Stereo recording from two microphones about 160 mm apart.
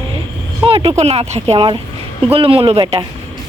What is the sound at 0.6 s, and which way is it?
Speech, 35° right (ahead or behind).